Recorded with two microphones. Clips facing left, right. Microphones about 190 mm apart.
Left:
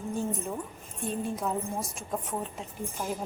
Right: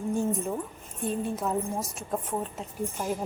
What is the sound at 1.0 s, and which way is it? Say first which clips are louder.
A woman's voice: right 2 dB; 5° right (ahead or behind).